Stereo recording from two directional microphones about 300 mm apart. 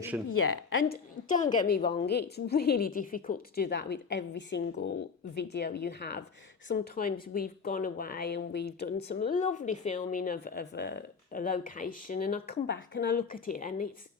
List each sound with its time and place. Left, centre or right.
0.3 s a woman's voice: left
0.9 s a woman's voice: centre
2.0 s a woman's voice: left